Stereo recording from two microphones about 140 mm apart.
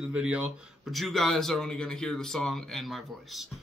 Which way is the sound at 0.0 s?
5° right (ahead or behind).